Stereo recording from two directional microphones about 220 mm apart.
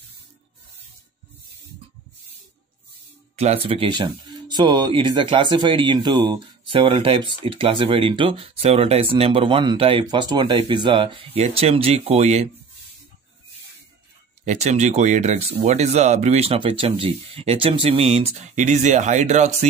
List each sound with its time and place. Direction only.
3.3 s speech: 25° right (ahead or behind)
14.4 s speech: 30° right (ahead or behind)